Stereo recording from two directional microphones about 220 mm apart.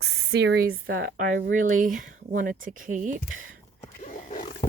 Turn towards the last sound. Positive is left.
turn(degrees=35)  # may be behind; listen again after turning